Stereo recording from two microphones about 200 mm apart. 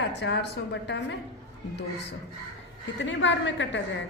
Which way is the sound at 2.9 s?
65° left (ahead or behind).